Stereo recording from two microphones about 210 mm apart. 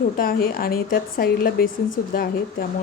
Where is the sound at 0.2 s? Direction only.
45° left (ahead or behind).